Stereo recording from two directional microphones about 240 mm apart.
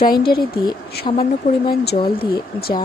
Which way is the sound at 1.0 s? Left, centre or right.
Left.